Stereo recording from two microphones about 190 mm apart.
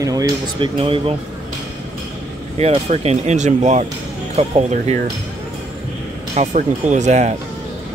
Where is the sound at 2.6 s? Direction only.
35° right (ahead or behind).